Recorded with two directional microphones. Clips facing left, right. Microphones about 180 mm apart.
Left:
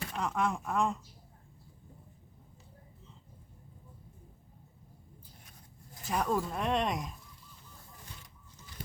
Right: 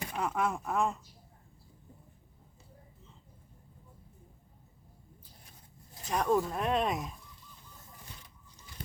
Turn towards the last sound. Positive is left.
turn(degrees=0)  # may be behind; listen again after turning